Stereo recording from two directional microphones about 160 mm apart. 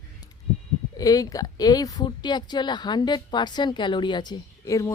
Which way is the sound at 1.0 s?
20° left (ahead or behind).